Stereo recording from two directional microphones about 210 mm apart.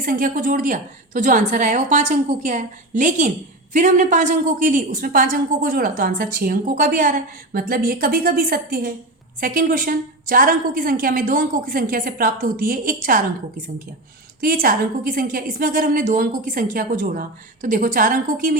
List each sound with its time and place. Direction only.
0.0 s a woman's voice: 45° right (ahead or behind)